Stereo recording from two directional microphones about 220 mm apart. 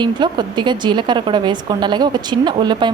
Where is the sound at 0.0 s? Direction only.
20° right (ahead or behind).